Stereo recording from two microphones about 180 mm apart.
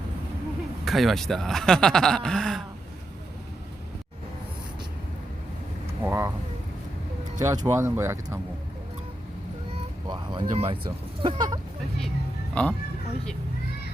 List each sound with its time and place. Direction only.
0.9 s speech: centre (ahead or behind)
6.1 s vehicle: 15° right (ahead or behind)
7.3 s speech: 20° right (ahead or behind)
10.1 s speech: 25° right (ahead or behind)
12.6 s speech: 5° left (ahead or behind)